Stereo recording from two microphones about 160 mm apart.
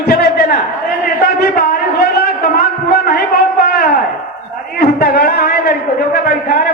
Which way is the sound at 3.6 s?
70° left (ahead or behind).